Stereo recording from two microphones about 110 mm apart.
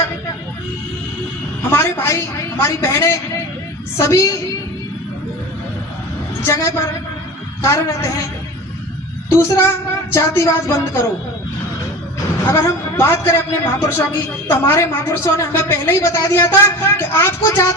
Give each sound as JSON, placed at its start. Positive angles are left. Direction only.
{"t": 1.7, "sound": "a woman's voice", "side_deg": 25}
{"t": 6.4, "sound": "a woman's voice", "side_deg": 25}
{"t": 9.3, "sound": "a woman's voice", "side_deg": 25}
{"t": 12.5, "sound": "a woman's voice", "side_deg": 25}